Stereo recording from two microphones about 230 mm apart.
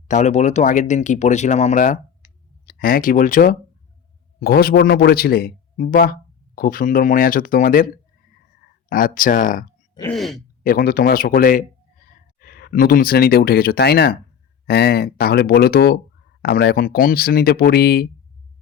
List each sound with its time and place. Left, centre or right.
0.1 s speech: left
8.9 s speech: left
10.1 s speech: centre
10.6 s speech: left